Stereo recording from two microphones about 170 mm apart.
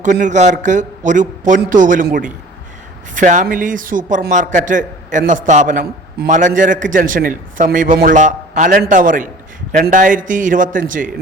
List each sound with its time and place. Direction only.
0.0 s a man's voice: 45° right (ahead or behind)